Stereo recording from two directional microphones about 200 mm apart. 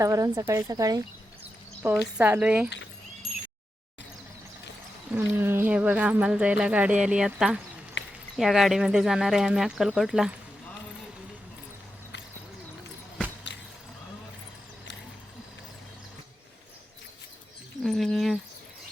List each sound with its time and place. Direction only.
0.0 s speech: 15° right (ahead or behind)
2.1 s speech: 10° right (ahead or behind)
5.1 s speech: 10° right (ahead or behind)
8.0 s a sound: 60° left (ahead or behind)
8.4 s speech: centre (ahead or behind)
17.8 s a sound: centre (ahead or behind)